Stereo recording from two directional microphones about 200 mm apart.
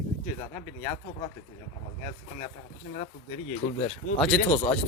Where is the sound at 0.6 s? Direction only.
15° left (ahead or behind).